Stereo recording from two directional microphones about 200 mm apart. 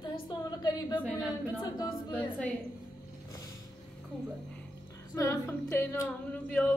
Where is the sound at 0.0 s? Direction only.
20° left (ahead or behind).